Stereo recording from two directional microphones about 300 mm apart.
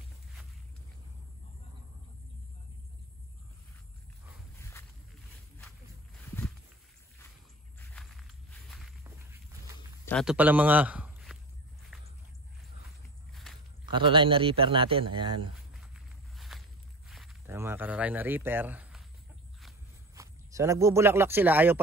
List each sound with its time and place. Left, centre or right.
4.6 s walk: centre
6.2 s a sound: centre
7.8 s walk: centre
10.0 s a man's voice: centre
11.9 s a sound: centre
13.3 s walk: centre
13.9 s a man's voice: centre
15.7 s walk: centre
17.1 s speech: centre
20.2 s speech: centre